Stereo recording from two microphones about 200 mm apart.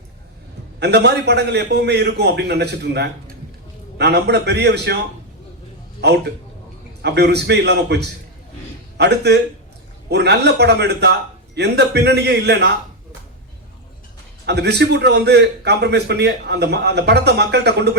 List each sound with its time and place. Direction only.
0.8 s a man's voice: 55° right (ahead or behind)
6.0 s a man's voice: 55° right (ahead or behind)
14.4 s a man's voice: 55° right (ahead or behind)